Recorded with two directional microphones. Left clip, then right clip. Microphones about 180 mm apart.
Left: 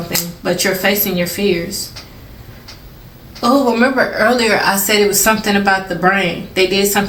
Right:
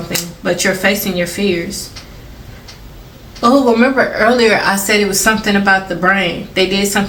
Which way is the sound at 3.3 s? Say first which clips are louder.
Right 2 dB; 25° right (ahead or behind).